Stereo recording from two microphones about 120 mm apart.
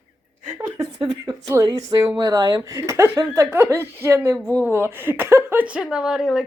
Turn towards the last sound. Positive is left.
turn(degrees=-5)  # may be behind; listen again after turning